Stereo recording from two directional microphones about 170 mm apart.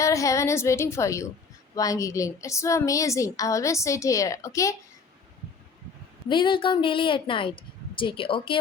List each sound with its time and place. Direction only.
0.0 s a woman's voice: 20° left (ahead or behind)
6.2 s a woman's voice: 30° left (ahead or behind)